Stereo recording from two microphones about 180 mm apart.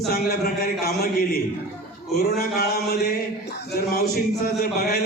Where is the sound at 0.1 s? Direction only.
60° left (ahead or behind).